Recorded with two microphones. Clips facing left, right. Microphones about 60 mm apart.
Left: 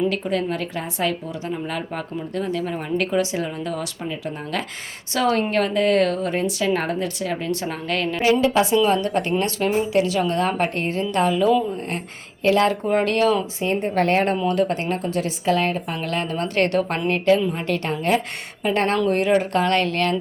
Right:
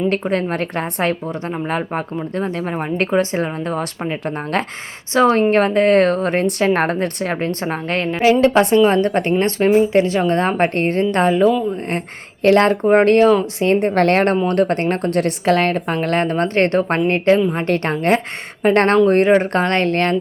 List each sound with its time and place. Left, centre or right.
0.1 s a woman's voice: right
5.1 s a woman's voice: right
8.2 s a woman's voice: right
8.7 s a woman's voice: right
12.4 s a woman's voice: right
13.4 s a woman's voice: right
14.4 s a woman's voice: right
19.0 s a woman's voice: right